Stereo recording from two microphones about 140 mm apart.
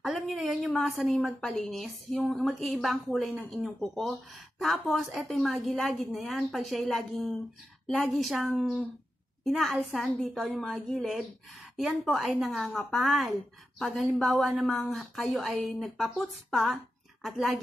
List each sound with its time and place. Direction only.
0.0 s a woman's voice: centre (ahead or behind)